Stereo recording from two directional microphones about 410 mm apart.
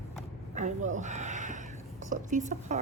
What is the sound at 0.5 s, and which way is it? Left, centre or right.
Speech, centre.